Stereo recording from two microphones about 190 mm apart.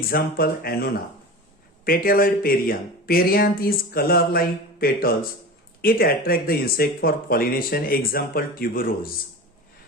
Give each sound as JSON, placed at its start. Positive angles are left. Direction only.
{"t": 0.0, "sound": "speech", "side_deg": 50}